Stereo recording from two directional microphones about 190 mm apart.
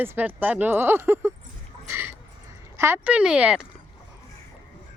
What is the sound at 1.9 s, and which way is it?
Dog, 10° right (ahead or behind).